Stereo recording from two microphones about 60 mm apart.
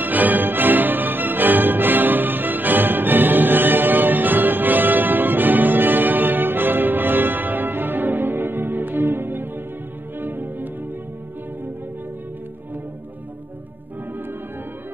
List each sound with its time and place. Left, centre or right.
0.0 s music: right